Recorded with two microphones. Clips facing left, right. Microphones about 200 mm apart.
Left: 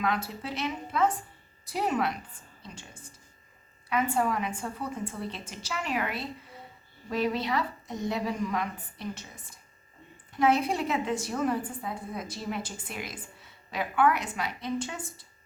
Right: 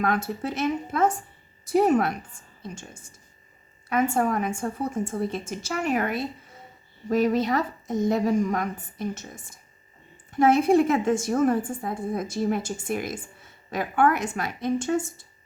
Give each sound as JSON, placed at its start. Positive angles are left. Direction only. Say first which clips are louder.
{"t": 0.0, "sound": "a woman's voice", "louder": "right 5 dB", "side_deg": -50}
{"t": 3.8, "sound": "a woman's voice", "louder": "right 4 dB", "side_deg": -45}